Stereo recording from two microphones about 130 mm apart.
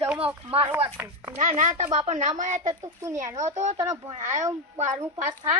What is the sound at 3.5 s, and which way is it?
Speech, 65° right (ahead or behind).